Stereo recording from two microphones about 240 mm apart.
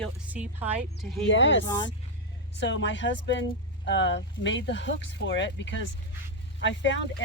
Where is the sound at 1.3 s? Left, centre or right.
Left.